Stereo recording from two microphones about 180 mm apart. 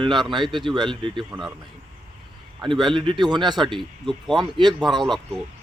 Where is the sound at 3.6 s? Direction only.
Centre (ahead or behind).